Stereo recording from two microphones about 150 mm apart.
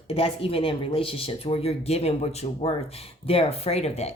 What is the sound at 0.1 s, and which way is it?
Speech, 40° left (ahead or behind).